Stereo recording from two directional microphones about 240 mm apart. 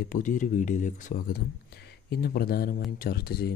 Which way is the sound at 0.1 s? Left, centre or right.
Left.